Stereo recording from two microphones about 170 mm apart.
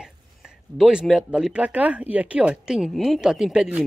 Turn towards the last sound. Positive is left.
turn(degrees=-5)  # may be behind; listen again after turning